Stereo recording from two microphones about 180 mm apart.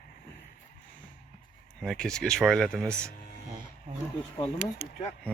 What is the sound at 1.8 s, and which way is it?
Speech, centre (ahead or behind).